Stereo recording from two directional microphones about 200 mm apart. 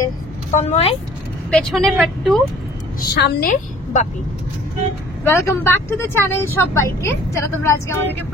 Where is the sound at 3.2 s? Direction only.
45° left (ahead or behind).